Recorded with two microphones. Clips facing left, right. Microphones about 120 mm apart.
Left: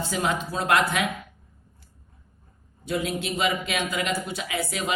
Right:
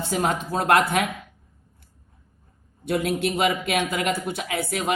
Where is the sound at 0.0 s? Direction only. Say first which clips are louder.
Right 2 dB; 50° right (ahead or behind).